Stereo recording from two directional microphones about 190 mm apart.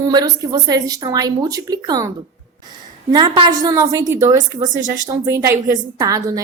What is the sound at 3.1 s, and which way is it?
A woman's voice, 25° right (ahead or behind).